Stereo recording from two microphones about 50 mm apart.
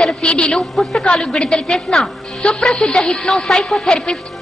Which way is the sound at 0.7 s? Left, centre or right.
Centre.